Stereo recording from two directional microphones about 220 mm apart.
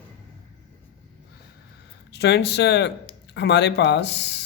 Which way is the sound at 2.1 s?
50° left (ahead or behind).